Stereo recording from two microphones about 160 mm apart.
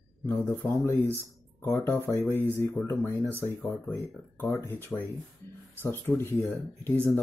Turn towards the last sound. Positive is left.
turn(degrees=15)  # may be behind; listen again after turning